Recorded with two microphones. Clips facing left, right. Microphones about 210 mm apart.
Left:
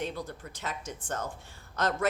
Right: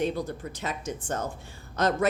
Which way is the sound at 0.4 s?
15° right (ahead or behind).